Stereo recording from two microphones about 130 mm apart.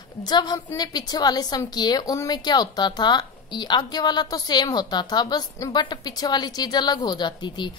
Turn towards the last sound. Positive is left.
turn(degrees=35)  # may be behind; listen again after turning